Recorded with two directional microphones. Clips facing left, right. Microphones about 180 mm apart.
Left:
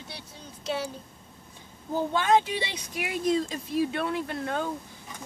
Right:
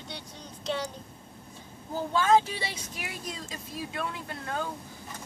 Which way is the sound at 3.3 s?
25° left (ahead or behind).